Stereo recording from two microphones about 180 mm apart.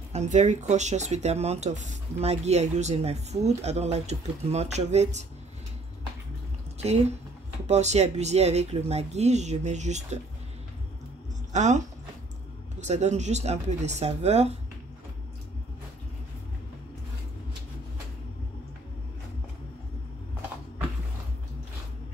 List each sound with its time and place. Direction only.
0.1 s speech: 40° right (ahead or behind)
7.6 s speech: 40° right (ahead or behind)
11.5 s speech: 40° right (ahead or behind)